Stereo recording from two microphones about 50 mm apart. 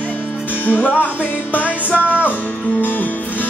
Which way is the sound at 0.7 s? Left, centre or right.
Left.